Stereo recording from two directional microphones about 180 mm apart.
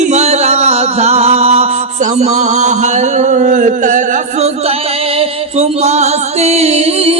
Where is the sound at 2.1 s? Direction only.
40° right (ahead or behind).